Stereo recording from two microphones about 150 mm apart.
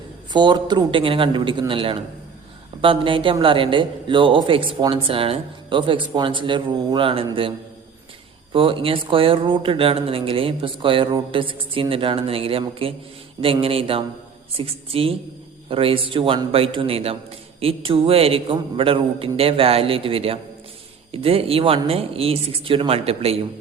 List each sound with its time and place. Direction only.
0.3 s a man's voice: 30° right (ahead or behind)
8.5 s a man's voice: 35° right (ahead or behind)